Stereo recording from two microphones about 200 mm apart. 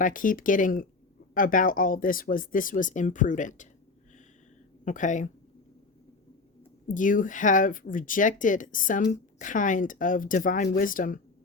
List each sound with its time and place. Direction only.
0.0 s speech: 40° left (ahead or behind)
4.9 s speech: 40° left (ahead or behind)
6.8 s speech: 40° left (ahead or behind)